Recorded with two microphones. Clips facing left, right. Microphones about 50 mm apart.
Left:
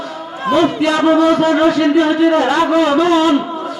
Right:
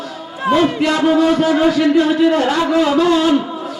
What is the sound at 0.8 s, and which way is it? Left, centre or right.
A man's voice, left.